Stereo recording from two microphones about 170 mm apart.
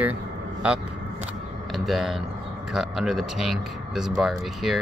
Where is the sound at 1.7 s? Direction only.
Centre (ahead or behind).